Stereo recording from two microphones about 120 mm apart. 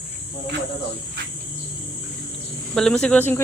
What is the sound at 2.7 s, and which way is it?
Speech, 5° left (ahead or behind).